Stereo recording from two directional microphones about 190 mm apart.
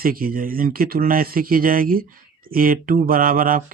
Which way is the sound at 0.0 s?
50° right (ahead or behind).